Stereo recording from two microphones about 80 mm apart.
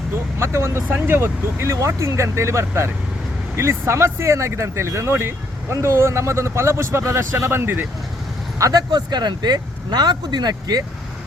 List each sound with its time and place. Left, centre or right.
0.3 s speech: right
8.5 s speech: right